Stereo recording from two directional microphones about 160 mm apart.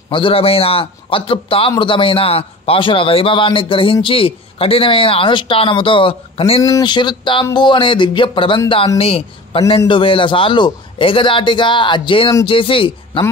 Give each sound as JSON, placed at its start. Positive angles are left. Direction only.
{"t": 0.1, "sound": "a man's voice", "side_deg": 35}
{"t": 6.6, "sound": "a man's voice", "side_deg": 25}